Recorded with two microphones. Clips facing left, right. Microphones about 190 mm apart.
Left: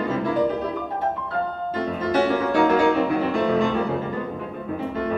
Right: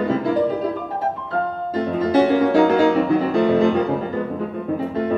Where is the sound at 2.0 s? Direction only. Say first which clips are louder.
Right 5 dB; 35° right (ahead or behind).